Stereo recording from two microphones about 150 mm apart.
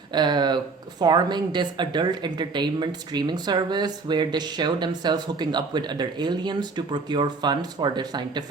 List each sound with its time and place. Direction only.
0.1 s speech: 30° right (ahead or behind)